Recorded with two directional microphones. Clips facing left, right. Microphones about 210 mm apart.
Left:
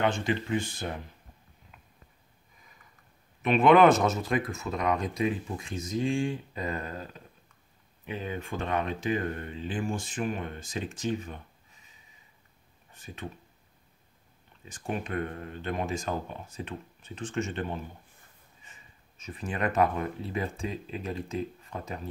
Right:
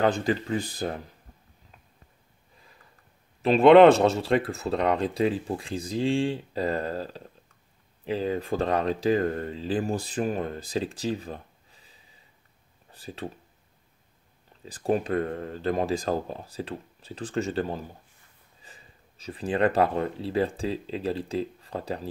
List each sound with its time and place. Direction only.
0.0 s speech: 35° right (ahead or behind)
3.4 s speech: 30° right (ahead or behind)
14.6 s speech: 35° right (ahead or behind)